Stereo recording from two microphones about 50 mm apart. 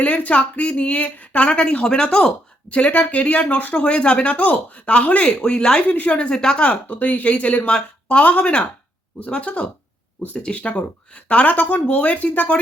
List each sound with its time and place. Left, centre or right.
0.0 s a woman's voice: left
3.8 s a woman's voice: left
5.9 s a woman's voice: left
6.7 s a woman's voice: left